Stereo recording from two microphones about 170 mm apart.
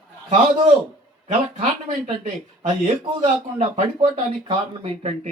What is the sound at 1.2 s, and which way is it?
A man's voice, 45° right (ahead or behind).